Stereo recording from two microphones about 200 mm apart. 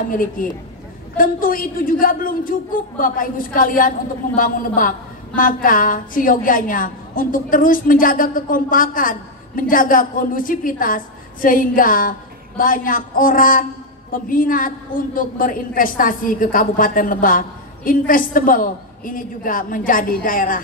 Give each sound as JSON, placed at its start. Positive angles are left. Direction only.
{"t": 0.1, "sound": "a woman's voice", "side_deg": 45}